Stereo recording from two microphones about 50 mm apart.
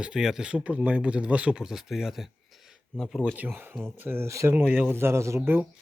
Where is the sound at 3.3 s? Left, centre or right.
Right.